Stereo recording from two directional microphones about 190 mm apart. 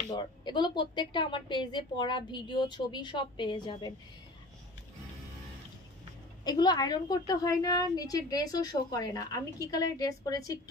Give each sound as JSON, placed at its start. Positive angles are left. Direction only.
{"t": 0.1, "sound": "a woman's voice", "side_deg": 25}
{"t": 6.4, "sound": "a woman's voice", "side_deg": 20}